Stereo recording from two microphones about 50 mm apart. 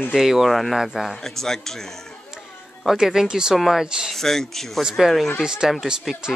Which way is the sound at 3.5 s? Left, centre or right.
Centre.